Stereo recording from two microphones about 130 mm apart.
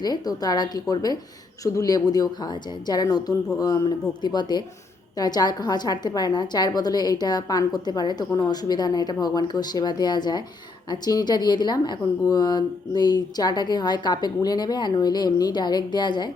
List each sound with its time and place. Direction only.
0.0 s a woman's voice: 30° left (ahead or behind)